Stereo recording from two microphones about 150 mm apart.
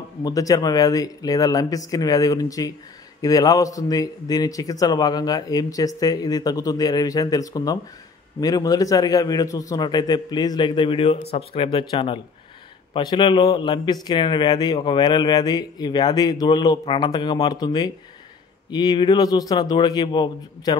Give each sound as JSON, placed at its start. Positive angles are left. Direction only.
{"t": 0.2, "sound": "a man's voice", "side_deg": 25}